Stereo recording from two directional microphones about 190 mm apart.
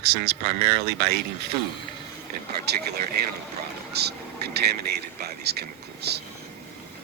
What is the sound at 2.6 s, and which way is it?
Speech, 60° right (ahead or behind).